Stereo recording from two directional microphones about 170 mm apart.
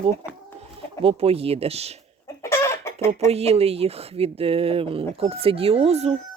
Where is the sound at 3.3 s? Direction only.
35° right (ahead or behind).